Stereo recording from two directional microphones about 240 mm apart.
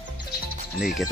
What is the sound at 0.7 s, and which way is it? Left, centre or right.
Speech, centre.